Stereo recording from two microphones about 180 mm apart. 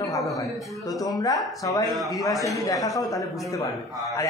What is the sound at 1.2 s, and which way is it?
A man's voice, 20° left (ahead or behind).